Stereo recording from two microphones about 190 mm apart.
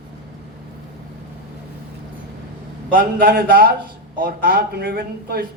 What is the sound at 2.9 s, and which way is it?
A man's voice, 50° right (ahead or behind).